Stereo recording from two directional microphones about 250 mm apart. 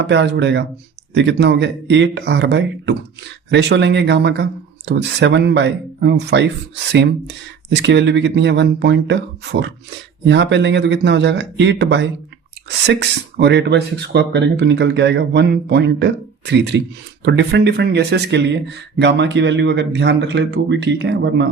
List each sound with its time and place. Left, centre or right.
0.1 s speech: right